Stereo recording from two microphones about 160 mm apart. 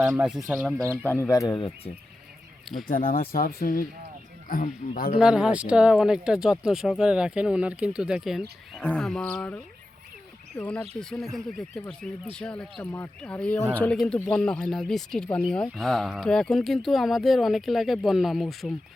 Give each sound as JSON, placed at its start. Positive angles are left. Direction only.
{"t": 0.2, "sound": "speech", "side_deg": -5}
{"t": 1.0, "sound": "speech", "side_deg": 15}
{"t": 2.8, "sound": "speech", "side_deg": 60}
{"t": 5.1, "sound": "speech", "side_deg": -5}